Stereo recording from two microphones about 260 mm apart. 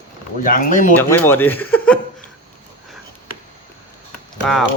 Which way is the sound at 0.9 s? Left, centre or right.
Centre.